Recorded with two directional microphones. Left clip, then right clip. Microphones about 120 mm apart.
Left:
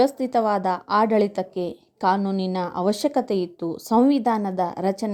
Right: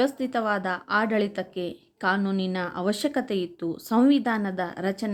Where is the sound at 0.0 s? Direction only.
30° left (ahead or behind).